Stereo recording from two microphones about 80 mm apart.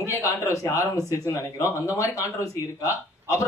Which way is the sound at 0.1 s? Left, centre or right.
Left.